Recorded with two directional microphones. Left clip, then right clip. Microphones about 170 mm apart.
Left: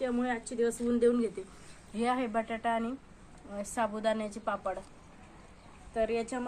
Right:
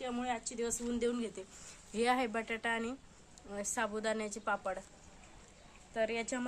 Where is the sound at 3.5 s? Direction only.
15° right (ahead or behind).